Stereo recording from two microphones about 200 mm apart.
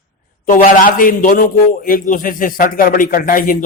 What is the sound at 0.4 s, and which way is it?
A man's voice, 40° left (ahead or behind).